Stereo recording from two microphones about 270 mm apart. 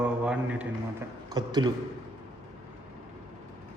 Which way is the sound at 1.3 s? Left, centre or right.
Centre.